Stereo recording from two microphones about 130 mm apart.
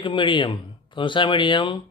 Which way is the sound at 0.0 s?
40° left (ahead or behind).